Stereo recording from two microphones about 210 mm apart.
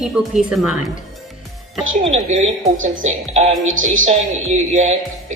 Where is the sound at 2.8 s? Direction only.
35° right (ahead or behind).